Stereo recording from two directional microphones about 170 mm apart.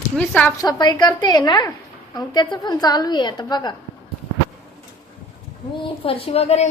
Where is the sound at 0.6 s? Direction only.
25° left (ahead or behind).